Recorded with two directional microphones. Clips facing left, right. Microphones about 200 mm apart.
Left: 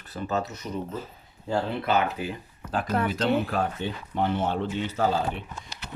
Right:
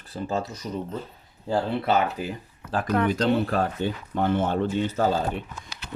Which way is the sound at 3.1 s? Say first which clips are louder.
Right 2 dB; 40° right (ahead or behind).